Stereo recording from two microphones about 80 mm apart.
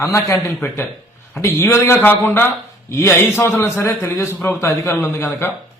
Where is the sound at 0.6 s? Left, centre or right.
Left.